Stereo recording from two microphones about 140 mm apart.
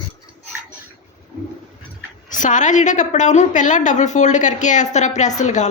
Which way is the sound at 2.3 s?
65° left (ahead or behind).